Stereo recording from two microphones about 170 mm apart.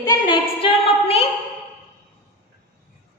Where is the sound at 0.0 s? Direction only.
30° left (ahead or behind).